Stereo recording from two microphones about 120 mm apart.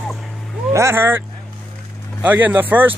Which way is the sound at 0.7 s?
20° right (ahead or behind).